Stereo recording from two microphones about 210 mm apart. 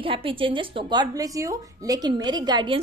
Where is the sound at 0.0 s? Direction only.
25° right (ahead or behind).